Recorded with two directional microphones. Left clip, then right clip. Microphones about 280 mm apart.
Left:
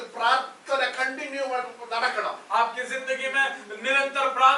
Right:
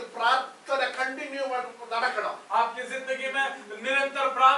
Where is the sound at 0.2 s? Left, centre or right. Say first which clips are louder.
Left 1 dB; centre.